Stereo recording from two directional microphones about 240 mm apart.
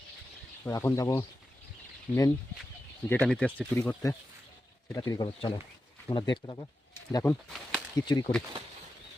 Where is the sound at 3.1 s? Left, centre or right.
Centre.